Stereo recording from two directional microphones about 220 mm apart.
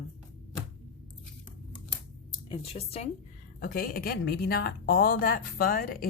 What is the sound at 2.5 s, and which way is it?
Speech, 25° left (ahead or behind).